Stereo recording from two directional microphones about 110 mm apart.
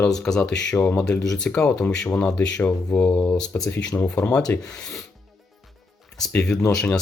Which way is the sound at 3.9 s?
20° left (ahead or behind).